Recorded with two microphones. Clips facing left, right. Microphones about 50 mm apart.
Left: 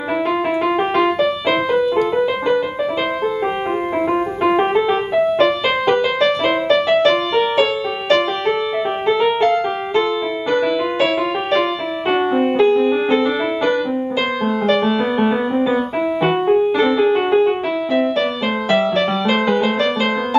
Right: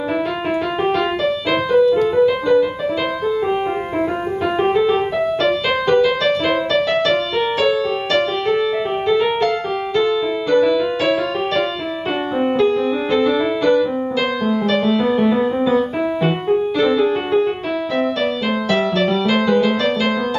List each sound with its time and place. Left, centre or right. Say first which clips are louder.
0.9 s music: left 2 dB; centre
4.6 s music: right 4 dB; centre